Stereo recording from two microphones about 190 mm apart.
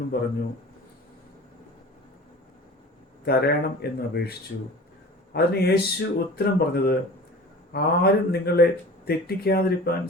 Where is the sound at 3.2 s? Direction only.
55° left (ahead or behind).